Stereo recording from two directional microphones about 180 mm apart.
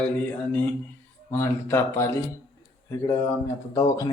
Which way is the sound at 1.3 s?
15° left (ahead or behind).